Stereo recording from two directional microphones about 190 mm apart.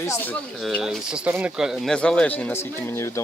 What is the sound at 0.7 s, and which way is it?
Speech, 5° right (ahead or behind).